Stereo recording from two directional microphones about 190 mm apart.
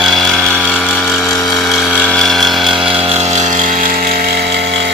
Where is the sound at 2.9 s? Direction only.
30° right (ahead or behind).